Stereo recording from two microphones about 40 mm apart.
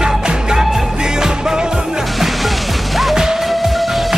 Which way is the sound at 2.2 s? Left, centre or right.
Centre.